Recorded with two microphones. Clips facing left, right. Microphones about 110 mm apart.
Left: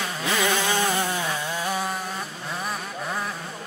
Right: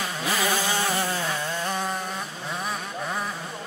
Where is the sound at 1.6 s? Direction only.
5° left (ahead or behind).